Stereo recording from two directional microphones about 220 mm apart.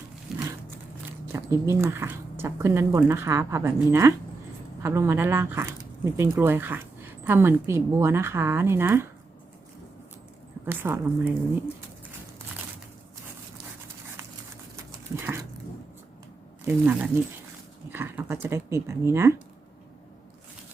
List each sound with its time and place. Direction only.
0.3 s a sound: centre (ahead or behind)
1.3 s speech: 10° right (ahead or behind)
10.7 s speech: 10° right (ahead or behind)
14.8 s dog: 15° right (ahead or behind)
16.6 s speech: 10° right (ahead or behind)